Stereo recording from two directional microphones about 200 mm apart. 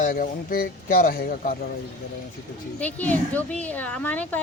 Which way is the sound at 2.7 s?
5° left (ahead or behind).